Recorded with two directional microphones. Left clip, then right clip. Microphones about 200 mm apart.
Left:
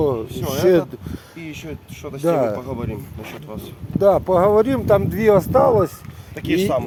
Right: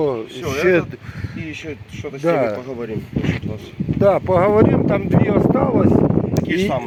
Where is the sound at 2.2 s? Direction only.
Centre (ahead or behind).